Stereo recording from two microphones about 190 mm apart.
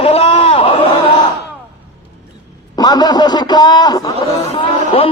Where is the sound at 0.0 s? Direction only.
30° left (ahead or behind).